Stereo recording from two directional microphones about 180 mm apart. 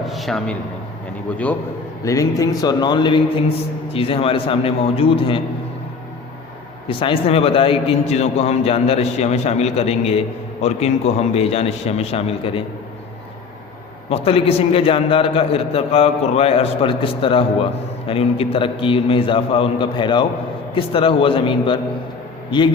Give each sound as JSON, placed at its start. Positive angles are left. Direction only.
{"t": 0.0, "sound": "a man's voice", "side_deg": 0}
{"t": 2.0, "sound": "a man's voice", "side_deg": 20}
{"t": 6.8, "sound": "a man's voice", "side_deg": 30}
{"t": 14.1, "sound": "a man's voice", "side_deg": 35}